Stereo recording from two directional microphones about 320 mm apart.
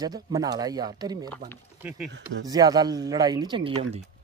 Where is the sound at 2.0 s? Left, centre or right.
Right.